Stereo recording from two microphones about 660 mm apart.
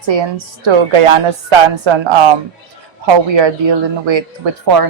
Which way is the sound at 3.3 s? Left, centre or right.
Right.